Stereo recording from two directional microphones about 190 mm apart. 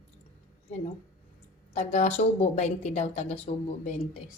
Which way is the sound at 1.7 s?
40° left (ahead or behind).